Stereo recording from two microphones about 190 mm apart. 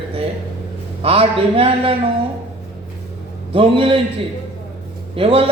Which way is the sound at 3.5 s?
30° right (ahead or behind).